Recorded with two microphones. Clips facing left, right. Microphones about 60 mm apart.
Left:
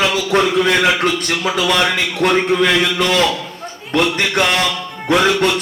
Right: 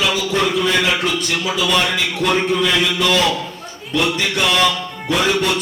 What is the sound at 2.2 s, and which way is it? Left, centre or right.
Speech, left.